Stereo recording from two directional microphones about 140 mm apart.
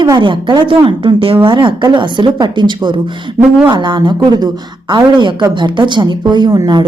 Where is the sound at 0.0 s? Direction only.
35° right (ahead or behind).